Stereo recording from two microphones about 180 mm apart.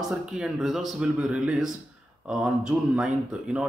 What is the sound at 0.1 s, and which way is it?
Speech, 5° right (ahead or behind).